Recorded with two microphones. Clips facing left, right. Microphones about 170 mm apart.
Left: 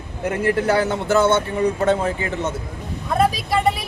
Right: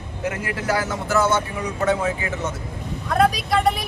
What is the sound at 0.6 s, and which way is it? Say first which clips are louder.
Speech: left 5 dB; 30° left (ahead or behind).